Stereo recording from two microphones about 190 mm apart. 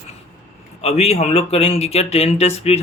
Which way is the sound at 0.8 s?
35° left (ahead or behind).